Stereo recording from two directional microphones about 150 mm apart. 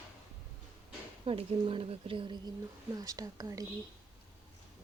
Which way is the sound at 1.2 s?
40° right (ahead or behind).